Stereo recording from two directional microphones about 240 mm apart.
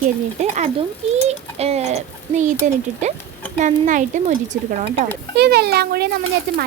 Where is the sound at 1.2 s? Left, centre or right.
Right.